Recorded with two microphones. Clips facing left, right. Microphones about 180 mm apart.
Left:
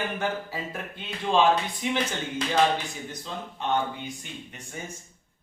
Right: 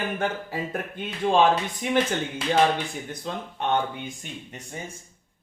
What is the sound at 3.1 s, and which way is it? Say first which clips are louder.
Speech: right 4 dB; 55° right (ahead or behind).